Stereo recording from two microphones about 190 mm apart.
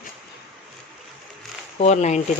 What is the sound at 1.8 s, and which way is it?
Speech, 35° left (ahead or behind).